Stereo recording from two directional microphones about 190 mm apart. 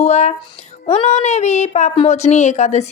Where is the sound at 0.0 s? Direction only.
35° left (ahead or behind).